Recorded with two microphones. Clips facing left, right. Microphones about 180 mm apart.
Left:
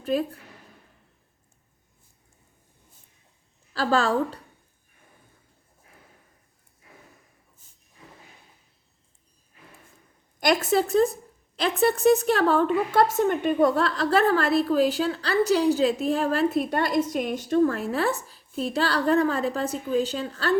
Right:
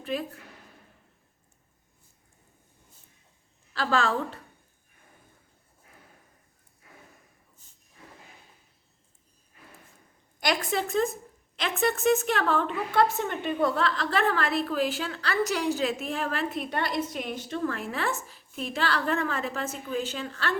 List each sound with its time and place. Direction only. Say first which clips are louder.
0.0 s a woman's voice: left 6 dB; 40° left (ahead or behind)
3.8 s a woman's voice: left 4 dB; 40° left (ahead or behind)
10.4 s a woman's voice: left 6 dB; 40° left (ahead or behind)